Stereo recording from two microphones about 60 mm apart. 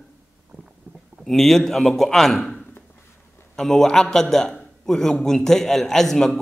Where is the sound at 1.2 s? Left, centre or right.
Centre.